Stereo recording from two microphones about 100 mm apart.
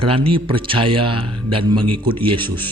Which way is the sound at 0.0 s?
65° right (ahead or behind).